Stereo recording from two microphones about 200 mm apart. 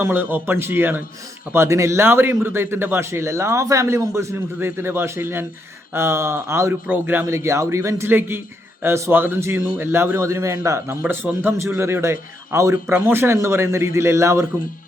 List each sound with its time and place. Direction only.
0.0 s a man's voice: 10° right (ahead or behind)